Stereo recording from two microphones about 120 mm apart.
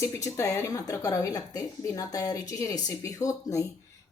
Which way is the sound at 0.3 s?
25° left (ahead or behind).